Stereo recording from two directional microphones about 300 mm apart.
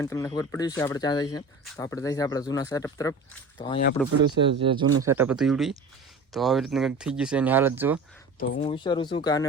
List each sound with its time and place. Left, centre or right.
0.0 s speech: centre
4.0 s speech: centre
4.6 s speech: centre
5.0 s speech: centre
8.4 s speech: left